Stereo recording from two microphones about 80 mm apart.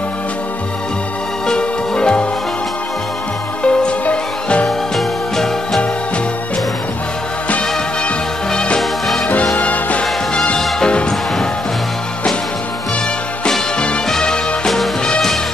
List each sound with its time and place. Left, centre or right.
1.5 s music: centre
3.6 s music: centre
7.4 s music: centre
9.6 s music: centre
13.4 s music: centre